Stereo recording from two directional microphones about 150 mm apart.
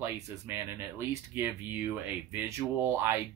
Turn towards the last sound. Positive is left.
turn(degrees=-20)  # may be behind; listen again after turning